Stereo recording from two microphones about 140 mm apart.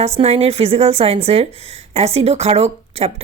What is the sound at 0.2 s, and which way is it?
A woman's voice, 45° right (ahead or behind).